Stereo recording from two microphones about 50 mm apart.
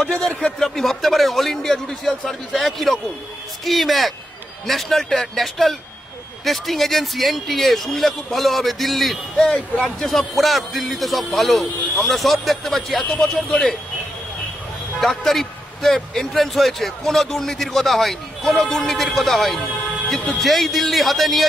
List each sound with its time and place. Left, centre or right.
0.0 s speech: centre
0.3 s speech: left
0.6 s a man's voice: centre
13.0 s speech: left
13.3 s speech: centre
15.0 s a man's voice: centre